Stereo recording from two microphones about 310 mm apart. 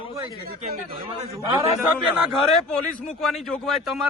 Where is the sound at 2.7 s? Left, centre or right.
Centre.